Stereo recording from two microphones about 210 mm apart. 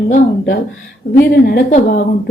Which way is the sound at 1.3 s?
45° left (ahead or behind).